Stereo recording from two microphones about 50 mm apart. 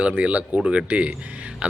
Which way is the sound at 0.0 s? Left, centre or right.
Right.